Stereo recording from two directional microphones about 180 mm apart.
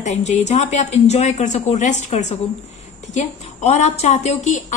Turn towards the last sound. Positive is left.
turn(degrees=40)  # may be behind; listen again after turning